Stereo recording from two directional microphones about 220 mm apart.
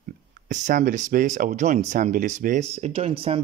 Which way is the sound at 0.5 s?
35° right (ahead or behind).